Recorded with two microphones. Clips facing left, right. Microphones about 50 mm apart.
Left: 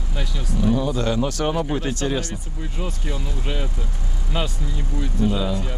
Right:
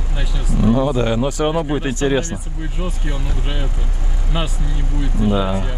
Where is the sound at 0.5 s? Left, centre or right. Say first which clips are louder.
Right 5 dB; right.